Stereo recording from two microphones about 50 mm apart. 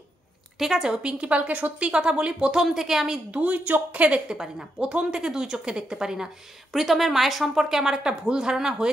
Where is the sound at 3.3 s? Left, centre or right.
Right.